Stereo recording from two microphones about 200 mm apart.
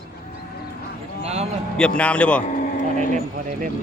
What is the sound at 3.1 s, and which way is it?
Speech, 45° right (ahead or behind).